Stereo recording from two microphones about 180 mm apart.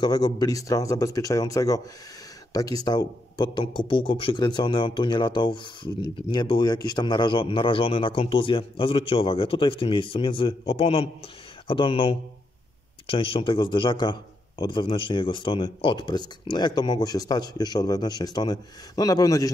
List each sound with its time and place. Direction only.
0.0 s speech: 20° left (ahead or behind)